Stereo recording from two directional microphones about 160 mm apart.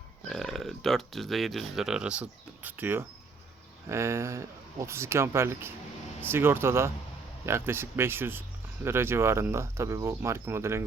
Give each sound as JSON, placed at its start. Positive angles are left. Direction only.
{"t": 0.3, "sound": "speech", "side_deg": 0}